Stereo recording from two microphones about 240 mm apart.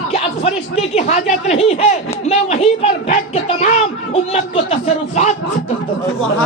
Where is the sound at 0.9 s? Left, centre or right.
Left.